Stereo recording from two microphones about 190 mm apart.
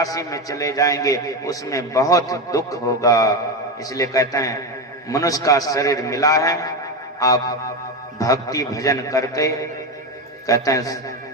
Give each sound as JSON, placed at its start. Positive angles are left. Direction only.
{"t": 0.0, "sound": "a man's voice", "side_deg": 15}
{"t": 7.2, "sound": "music", "side_deg": 20}
{"t": 8.2, "sound": "a man's voice", "side_deg": 20}